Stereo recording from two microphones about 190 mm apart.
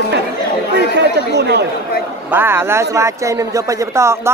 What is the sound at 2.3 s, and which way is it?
Speech, 10° right (ahead or behind).